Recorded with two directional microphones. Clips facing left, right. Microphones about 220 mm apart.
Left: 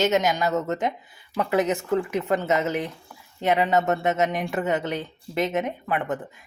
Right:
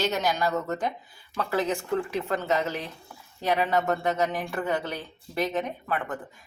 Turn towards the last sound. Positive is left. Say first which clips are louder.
# left 4 dB
turn(degrees=20)  # may be behind; listen again after turning